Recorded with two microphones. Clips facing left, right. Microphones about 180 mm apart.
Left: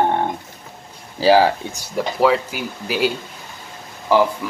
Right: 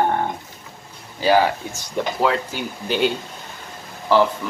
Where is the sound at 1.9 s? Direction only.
5° left (ahead or behind).